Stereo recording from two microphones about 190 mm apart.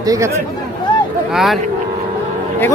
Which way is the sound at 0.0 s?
20° right (ahead or behind).